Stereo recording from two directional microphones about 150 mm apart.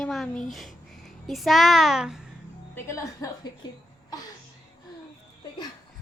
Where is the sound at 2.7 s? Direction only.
20° left (ahead or behind).